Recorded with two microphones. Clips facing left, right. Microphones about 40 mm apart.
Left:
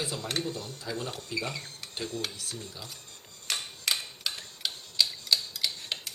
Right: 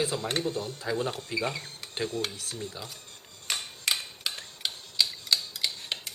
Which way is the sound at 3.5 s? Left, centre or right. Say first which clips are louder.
Right 1 dB; centre.